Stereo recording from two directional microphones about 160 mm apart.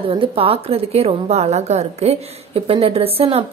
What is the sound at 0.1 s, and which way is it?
A woman's voice, 35° right (ahead or behind).